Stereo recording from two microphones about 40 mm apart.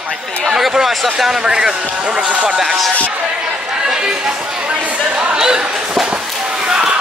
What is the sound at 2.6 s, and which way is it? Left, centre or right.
Speech, centre.